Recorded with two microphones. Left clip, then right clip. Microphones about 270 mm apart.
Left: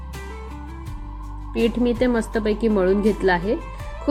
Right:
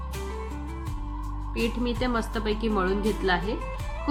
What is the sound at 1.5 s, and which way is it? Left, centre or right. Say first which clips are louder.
Speech: left 8 dB; left.